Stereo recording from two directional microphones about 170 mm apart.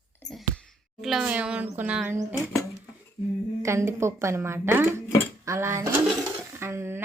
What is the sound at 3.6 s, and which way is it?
A woman's voice, 15° right (ahead or behind).